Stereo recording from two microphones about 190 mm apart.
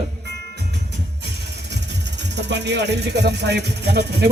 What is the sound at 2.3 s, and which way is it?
Speech, 65° right (ahead or behind).